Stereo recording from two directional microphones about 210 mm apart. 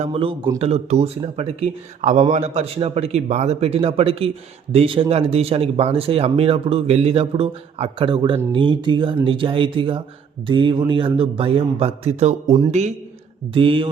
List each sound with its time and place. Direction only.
0.0 s speech: 25° right (ahead or behind)